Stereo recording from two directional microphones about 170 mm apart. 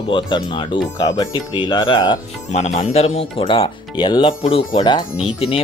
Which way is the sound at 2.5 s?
40° left (ahead or behind).